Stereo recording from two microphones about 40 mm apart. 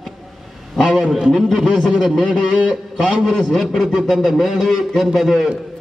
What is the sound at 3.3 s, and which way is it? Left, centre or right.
Speech, centre.